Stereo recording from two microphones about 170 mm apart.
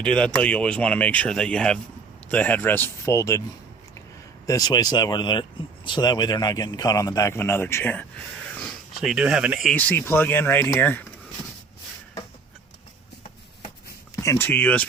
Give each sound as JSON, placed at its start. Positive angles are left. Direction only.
{"t": 0.0, "sound": "speech", "side_deg": 5}
{"t": 4.4, "sound": "speech", "side_deg": 20}
{"t": 8.5, "sound": "speech", "side_deg": 0}
{"t": 9.9, "sound": "speech", "side_deg": 10}
{"t": 14.2, "sound": "speech", "side_deg": 15}